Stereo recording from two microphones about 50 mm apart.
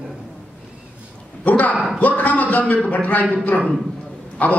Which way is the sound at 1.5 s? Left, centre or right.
Left.